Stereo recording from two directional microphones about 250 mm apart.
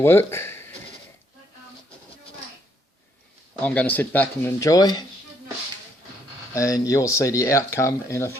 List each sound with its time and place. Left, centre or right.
0.0 s speech: centre
3.6 s speech: centre
6.5 s speech: centre